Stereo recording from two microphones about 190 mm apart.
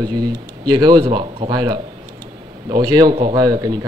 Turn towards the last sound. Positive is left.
turn(degrees=-20)  # may be behind; listen again after turning